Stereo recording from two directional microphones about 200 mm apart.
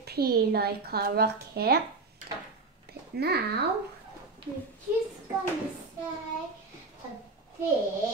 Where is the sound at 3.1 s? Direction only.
55° right (ahead or behind).